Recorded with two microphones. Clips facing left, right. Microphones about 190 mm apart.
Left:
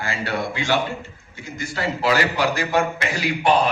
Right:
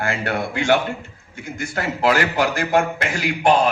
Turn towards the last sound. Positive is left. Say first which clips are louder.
# right 2 dB
turn(degrees=-50)  # may be behind; listen again after turning